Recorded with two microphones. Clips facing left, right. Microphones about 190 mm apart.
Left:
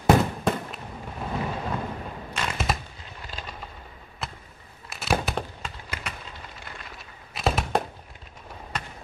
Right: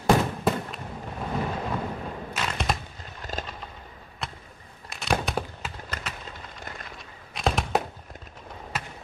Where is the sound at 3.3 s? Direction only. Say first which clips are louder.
Right 7 dB; 45° right (ahead or behind).